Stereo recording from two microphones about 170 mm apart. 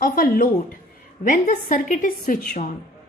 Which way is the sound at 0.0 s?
60° left (ahead or behind).